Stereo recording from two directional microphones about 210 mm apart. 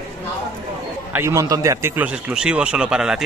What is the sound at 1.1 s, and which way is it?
Speech, 15° right (ahead or behind).